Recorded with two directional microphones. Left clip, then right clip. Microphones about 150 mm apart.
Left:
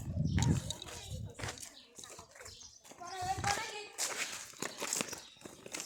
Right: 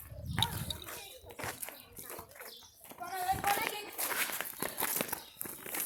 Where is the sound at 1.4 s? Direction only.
25° left (ahead or behind).